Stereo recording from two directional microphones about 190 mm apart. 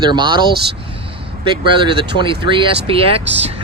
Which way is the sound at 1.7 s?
25° right (ahead or behind).